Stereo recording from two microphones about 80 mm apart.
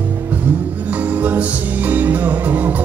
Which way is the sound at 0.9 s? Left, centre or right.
Right.